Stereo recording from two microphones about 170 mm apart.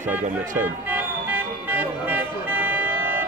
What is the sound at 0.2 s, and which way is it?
Speech, 50° right (ahead or behind).